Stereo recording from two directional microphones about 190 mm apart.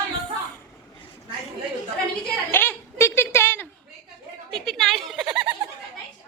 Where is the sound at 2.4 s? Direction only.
10° left (ahead or behind).